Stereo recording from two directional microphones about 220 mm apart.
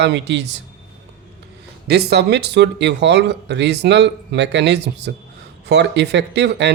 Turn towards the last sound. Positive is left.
turn(degrees=-50)  # may be behind; listen again after turning